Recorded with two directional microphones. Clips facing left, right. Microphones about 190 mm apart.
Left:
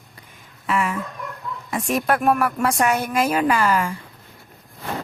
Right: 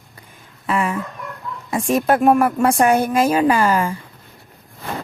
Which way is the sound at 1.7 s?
25° right (ahead or behind).